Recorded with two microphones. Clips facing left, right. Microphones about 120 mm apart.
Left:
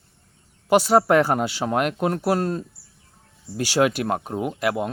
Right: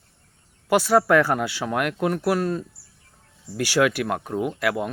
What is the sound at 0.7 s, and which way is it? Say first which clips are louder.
Speech: left 1 dB; 20° left (ahead or behind).